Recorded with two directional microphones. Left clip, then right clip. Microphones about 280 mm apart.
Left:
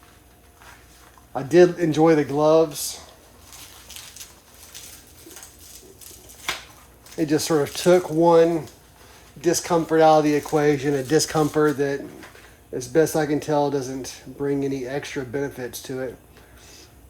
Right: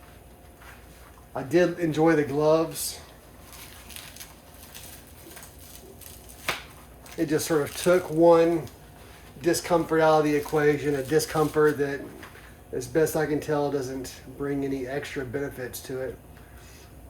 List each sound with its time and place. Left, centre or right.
1.3 s speech: left
7.2 s speech: left